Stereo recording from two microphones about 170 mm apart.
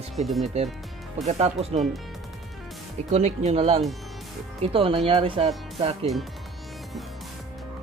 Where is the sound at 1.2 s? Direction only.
40° right (ahead or behind).